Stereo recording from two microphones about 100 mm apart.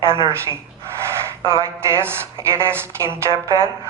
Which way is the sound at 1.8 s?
25° right (ahead or behind).